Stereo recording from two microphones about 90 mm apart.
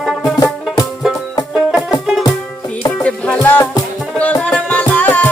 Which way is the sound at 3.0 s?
15° left (ahead or behind).